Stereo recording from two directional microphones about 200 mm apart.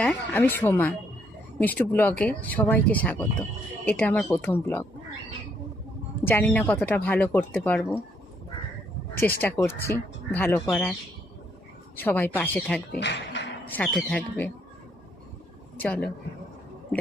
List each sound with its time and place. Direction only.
0.0 s speech: 10° left (ahead or behind)
6.2 s speech: 10° left (ahead or behind)
9.4 s speech: 10° left (ahead or behind)
11.9 s speech: 10° left (ahead or behind)
12.9 s speech: 60° left (ahead or behind)
13.7 s speech: 5° left (ahead or behind)
15.8 s speech: 5° left (ahead or behind)